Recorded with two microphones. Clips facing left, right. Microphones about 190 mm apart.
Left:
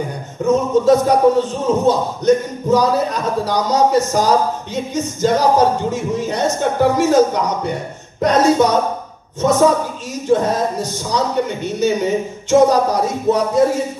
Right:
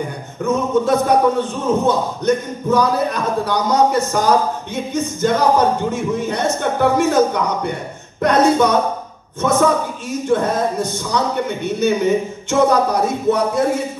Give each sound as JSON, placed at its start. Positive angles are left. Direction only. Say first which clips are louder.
{"t": 0.5, "sound": "a man's voice", "louder": "left 4 dB", "side_deg": -55}